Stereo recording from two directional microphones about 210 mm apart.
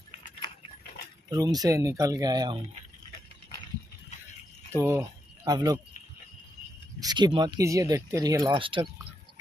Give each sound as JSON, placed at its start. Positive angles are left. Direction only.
{"t": 1.3, "sound": "speech", "side_deg": -15}
{"t": 4.7, "sound": "speech", "side_deg": -10}
{"t": 7.0, "sound": "speech", "side_deg": -20}